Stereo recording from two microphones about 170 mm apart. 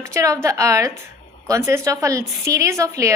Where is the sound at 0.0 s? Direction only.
15° right (ahead or behind).